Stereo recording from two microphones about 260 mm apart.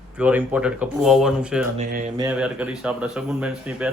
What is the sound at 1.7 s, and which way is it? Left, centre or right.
Speech, right.